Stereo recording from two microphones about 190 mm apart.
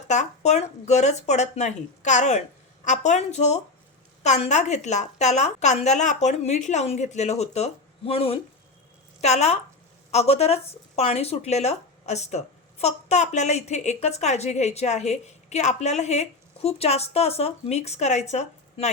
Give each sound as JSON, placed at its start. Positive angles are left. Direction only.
{"t": 0.1, "sound": "speech", "side_deg": 35}